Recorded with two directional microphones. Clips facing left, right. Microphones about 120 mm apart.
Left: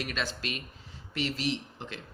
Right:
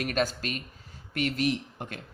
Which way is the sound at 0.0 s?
45° right (ahead or behind).